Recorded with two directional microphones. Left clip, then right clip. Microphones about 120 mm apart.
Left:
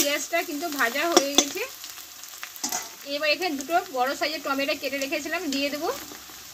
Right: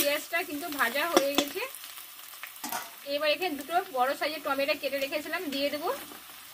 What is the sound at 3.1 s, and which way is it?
Speech, 35° left (ahead or behind).